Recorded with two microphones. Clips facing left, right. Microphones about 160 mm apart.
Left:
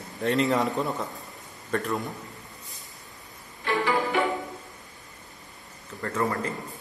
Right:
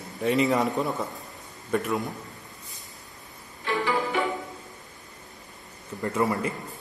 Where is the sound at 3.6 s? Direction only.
60° left (ahead or behind).